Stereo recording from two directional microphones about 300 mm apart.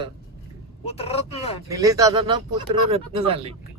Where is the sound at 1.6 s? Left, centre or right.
Centre.